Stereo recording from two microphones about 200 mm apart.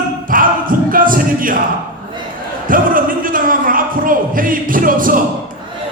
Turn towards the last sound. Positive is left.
turn(degrees=-45)  # may be behind; listen again after turning